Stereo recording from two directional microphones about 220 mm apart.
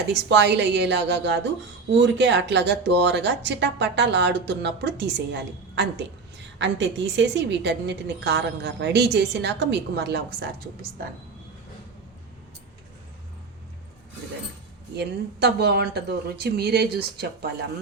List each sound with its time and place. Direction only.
0.1 s a woman's voice: 50° right (ahead or behind)
14.9 s a woman's voice: 50° right (ahead or behind)